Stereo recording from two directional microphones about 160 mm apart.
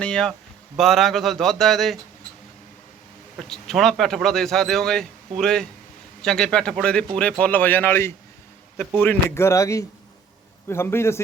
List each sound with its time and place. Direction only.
0.0 s speech: 5° left (ahead or behind)
3.3 s speech: centre (ahead or behind)